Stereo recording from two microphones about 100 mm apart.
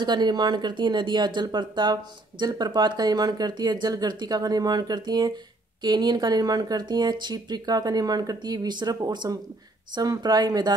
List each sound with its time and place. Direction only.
0.0 s speech: 45° right (ahead or behind)